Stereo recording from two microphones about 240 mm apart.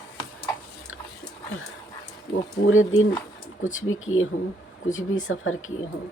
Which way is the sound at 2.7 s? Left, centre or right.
Left.